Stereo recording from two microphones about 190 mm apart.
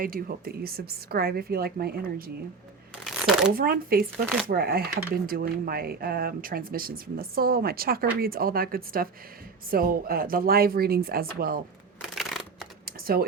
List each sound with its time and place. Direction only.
0.0 s speech: 50° right (ahead or behind)
3.0 s shuffling cards: centre (ahead or behind)
3.5 s speech: 50° right (ahead or behind)
12.0 s a sound: centre (ahead or behind)
12.8 s computer keyboard: 50° right (ahead or behind)